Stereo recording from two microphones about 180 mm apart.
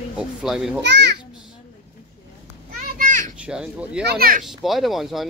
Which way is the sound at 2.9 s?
50° right (ahead or behind).